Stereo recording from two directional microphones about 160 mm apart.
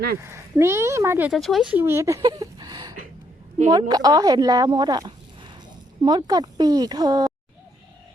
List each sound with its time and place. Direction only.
0.2 s speech: 15° right (ahead or behind)
1.3 s speech: centre (ahead or behind)
1.7 s speech: 15° right (ahead or behind)